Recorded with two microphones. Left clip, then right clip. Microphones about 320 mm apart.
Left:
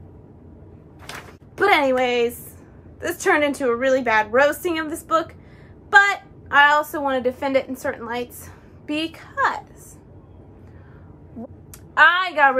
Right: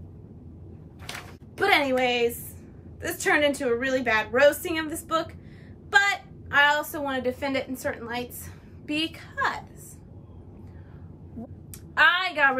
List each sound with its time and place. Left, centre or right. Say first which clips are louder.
1.6 s a woman's voice: left 5 dB; centre
11.9 s a woman's voice: left 5 dB; centre